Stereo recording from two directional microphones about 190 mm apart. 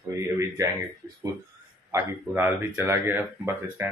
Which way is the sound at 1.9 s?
10° right (ahead or behind).